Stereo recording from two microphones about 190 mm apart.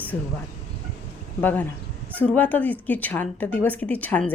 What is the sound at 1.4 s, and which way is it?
Speech, 10° left (ahead or behind).